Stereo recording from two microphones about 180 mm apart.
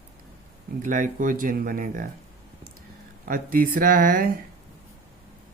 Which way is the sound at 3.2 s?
55° right (ahead or behind).